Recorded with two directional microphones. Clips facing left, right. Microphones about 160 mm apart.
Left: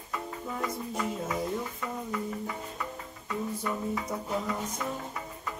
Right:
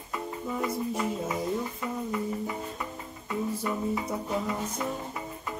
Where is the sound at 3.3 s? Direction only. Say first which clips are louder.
Right 2 dB; 20° right (ahead or behind).